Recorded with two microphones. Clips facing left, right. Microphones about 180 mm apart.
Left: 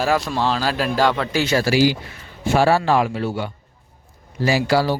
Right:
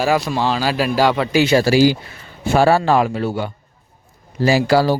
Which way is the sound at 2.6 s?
45° right (ahead or behind).